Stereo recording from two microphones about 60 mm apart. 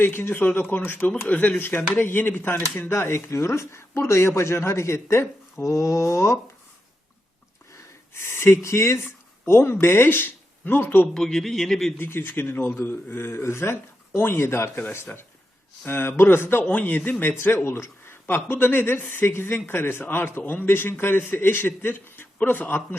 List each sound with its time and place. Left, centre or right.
0.0 s a man's voice: left
8.2 s speech: left
9.0 s a sound: left
9.8 s speech: left
11.1 s speech: centre
11.9 s a man's voice: left
16.6 s a man's voice: left